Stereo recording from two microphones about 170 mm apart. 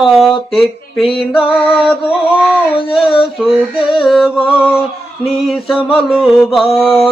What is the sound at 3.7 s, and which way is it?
Music, 30° left (ahead or behind).